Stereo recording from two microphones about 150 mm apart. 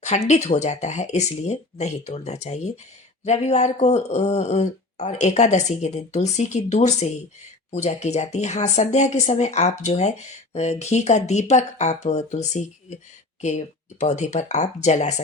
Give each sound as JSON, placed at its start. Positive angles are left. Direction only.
{"t": 0.0, "sound": "speech", "side_deg": 50}